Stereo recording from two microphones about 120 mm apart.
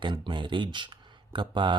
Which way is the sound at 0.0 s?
40° right (ahead or behind).